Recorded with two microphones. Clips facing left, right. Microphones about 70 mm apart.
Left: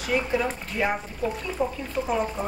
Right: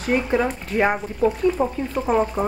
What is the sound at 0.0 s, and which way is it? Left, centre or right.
Speech, right.